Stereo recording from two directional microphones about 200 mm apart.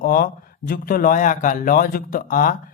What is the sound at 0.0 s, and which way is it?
A man's voice, 45° left (ahead or behind).